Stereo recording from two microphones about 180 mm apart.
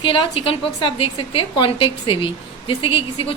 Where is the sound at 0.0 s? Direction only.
30° left (ahead or behind).